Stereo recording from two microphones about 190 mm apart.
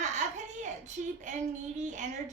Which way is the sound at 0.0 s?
40° right (ahead or behind).